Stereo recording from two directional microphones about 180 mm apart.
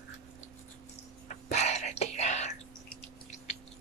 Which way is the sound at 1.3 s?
40° left (ahead or behind).